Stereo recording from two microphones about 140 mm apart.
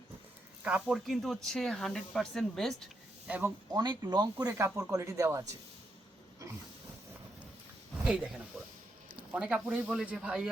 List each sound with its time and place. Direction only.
0.6 s speech: 5° right (ahead or behind)
3.2 s speech: 10° right (ahead or behind)
3.7 s speech: 30° right (ahead or behind)
8.0 s speech: 10° right (ahead or behind)
9.3 s speech: 10° right (ahead or behind)